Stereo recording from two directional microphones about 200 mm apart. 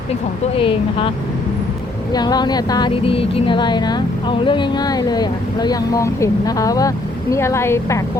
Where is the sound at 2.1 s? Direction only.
20° left (ahead or behind).